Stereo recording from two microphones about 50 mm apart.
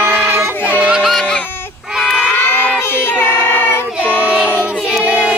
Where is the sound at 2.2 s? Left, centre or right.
Left.